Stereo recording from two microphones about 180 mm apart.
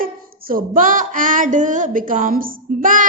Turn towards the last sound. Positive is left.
turn(degrees=-50)  # may be behind; listen again after turning